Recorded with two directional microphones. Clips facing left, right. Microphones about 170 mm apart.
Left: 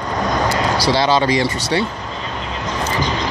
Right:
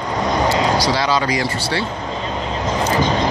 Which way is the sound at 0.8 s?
25° left (ahead or behind).